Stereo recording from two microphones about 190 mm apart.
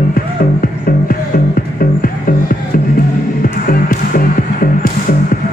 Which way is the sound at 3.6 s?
45° left (ahead or behind).